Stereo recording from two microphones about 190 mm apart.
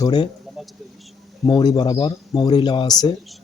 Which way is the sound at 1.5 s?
20° left (ahead or behind).